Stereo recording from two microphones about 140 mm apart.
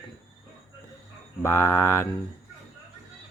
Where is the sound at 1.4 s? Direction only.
15° left (ahead or behind).